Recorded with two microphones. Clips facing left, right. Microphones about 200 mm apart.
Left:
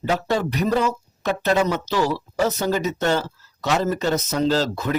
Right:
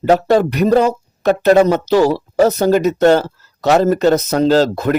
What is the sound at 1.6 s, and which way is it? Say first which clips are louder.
Speech: right 9 dB; 40° right (ahead or behind).